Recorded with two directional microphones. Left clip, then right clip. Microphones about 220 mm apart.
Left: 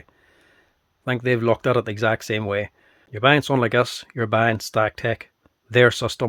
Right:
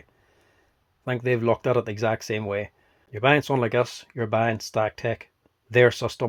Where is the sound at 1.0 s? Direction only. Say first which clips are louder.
Left 3 dB; 25° left (ahead or behind).